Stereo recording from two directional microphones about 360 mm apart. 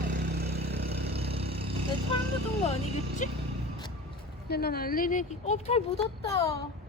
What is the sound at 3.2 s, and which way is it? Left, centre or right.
Speech, left.